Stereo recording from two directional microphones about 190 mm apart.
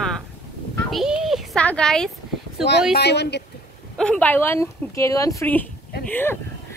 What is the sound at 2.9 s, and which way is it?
Speech, 60° left (ahead or behind).